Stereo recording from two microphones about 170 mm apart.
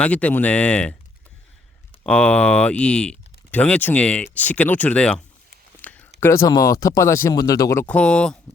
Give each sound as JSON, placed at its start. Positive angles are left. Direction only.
{"t": 0.0, "sound": "speech", "side_deg": 10}
{"t": 2.0, "sound": "speech", "side_deg": 5}
{"t": 5.8, "sound": "a sound", "side_deg": 10}
{"t": 6.1, "sound": "speech", "side_deg": 15}